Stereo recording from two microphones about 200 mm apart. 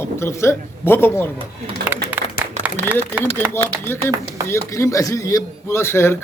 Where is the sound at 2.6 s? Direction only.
5° right (ahead or behind).